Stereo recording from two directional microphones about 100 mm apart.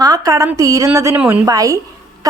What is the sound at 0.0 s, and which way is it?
A woman's voice, 40° right (ahead or behind).